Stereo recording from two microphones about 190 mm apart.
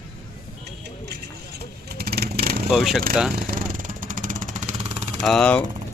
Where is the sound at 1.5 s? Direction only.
55° right (ahead or behind).